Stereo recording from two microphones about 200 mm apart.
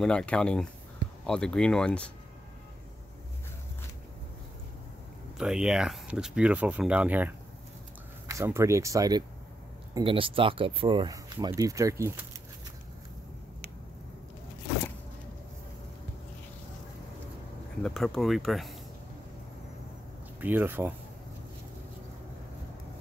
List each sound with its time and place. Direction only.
0.0 s speech: 5° left (ahead or behind)
5.4 s speech: 5° right (ahead or behind)
17.8 s speech: centre (ahead or behind)
20.3 s speech: 10° right (ahead or behind)